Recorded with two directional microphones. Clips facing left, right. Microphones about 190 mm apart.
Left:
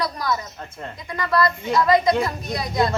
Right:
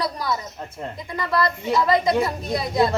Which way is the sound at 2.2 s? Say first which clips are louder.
Right 2 dB; 30° right (ahead or behind).